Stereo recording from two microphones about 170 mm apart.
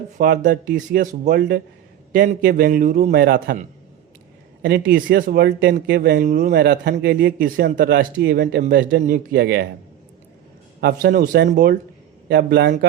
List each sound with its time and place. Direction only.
0.2 s speech: 65° right (ahead or behind)
1.4 s speech: 65° right (ahead or behind)
4.8 s speech: 55° right (ahead or behind)
6.2 s speech: 50° right (ahead or behind)
6.5 s speech: 70° right (ahead or behind)
10.8 s speech: 70° right (ahead or behind)